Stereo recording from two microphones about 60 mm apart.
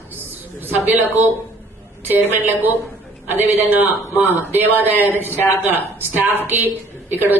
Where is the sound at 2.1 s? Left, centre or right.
Right.